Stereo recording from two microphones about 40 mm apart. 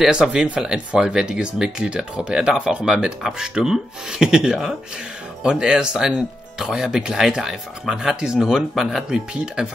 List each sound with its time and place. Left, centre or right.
0.0 s speech: centre
3.2 s speech: centre